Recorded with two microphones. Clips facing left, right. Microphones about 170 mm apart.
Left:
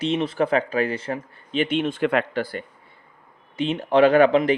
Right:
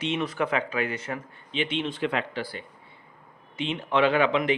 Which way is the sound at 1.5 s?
50° left (ahead or behind).